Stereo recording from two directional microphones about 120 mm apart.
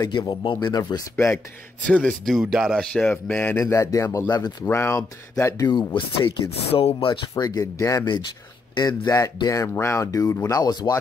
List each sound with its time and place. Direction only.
0.0 s speech: 35° left (ahead or behind)
1.9 s speech: 10° left (ahead or behind)
2.3 s speech: 5° right (ahead or behind); by 3.6 s 15° left (ahead or behind)
3.6 s speech: 25° left (ahead or behind)
4.6 s speech: 20° left (ahead or behind)
5.7 s speech: 40° left (ahead or behind)
6.7 s speech: 55° left (ahead or behind)
7.3 s speech: 30° left (ahead or behind)